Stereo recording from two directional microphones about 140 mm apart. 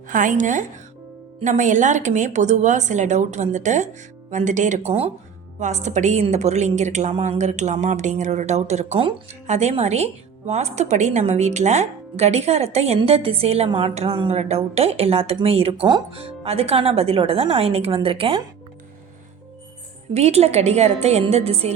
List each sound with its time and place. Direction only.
0.1 s a woman's voice: 70° right (ahead or behind); by 18.4 s 40° right (ahead or behind)
20.1 s a woman's voice: 50° right (ahead or behind)